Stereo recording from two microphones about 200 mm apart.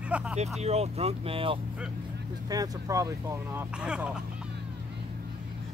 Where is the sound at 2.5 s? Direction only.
15° right (ahead or behind).